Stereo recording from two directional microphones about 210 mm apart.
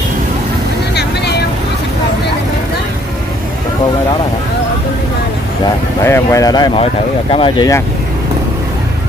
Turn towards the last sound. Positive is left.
turn(degrees=25)  # may be behind; listen again after turning